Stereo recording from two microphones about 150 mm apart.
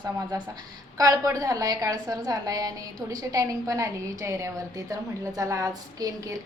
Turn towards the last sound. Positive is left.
turn(degrees=-25)  # may be behind; listen again after turning